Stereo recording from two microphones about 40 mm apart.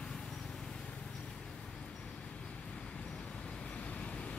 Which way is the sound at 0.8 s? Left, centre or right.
Left.